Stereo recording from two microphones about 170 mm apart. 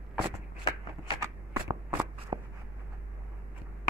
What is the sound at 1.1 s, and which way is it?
Shuffling cards, 15° right (ahead or behind).